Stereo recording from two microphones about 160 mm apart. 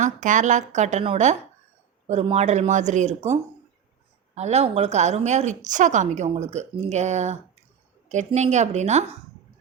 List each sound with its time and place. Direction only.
0.0 s a woman's voice: 50° right (ahead or behind)
4.4 s a woman's voice: 45° right (ahead or behind)